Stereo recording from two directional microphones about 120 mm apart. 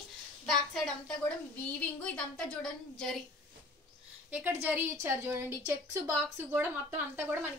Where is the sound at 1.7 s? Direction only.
10° left (ahead or behind).